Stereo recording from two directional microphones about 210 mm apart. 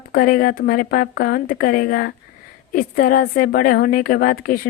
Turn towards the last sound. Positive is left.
turn(degrees=45)  # may be behind; listen again after turning